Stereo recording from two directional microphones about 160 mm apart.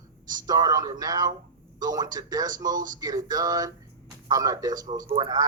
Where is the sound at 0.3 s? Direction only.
25° right (ahead or behind).